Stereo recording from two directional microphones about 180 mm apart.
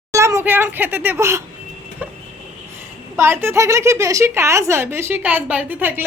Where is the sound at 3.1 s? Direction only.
15° right (ahead or behind).